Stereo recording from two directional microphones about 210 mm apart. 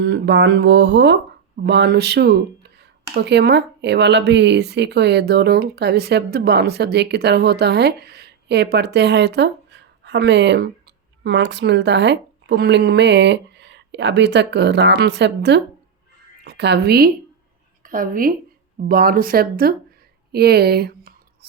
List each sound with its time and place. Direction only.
0.0 s speech: 55° right (ahead or behind)